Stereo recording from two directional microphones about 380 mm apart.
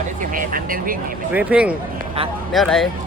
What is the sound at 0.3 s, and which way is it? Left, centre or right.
Speech, right.